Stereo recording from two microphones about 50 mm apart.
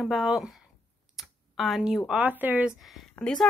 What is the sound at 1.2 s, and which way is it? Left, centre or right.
Computer keyboard, centre.